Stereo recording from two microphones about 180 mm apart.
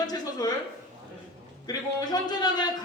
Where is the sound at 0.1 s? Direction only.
20° left (ahead or behind).